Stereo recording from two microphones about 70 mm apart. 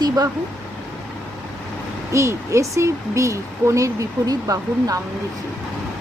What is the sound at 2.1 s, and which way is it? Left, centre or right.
Speech, right.